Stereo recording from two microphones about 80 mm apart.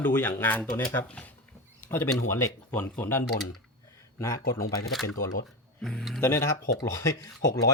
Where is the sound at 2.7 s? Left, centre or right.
Left.